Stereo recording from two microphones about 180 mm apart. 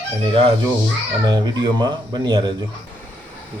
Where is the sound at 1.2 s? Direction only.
25° right (ahead or behind).